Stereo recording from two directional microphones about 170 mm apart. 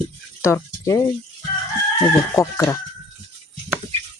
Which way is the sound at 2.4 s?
20° left (ahead or behind).